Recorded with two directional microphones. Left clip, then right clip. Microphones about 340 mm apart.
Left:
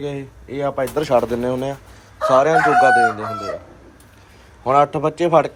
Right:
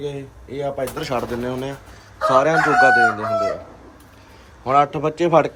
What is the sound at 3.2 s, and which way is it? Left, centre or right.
Chicken, centre.